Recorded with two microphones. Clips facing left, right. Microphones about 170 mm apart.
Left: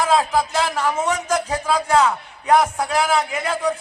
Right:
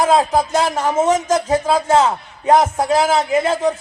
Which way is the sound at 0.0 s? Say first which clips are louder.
Right 4 dB; 35° right (ahead or behind).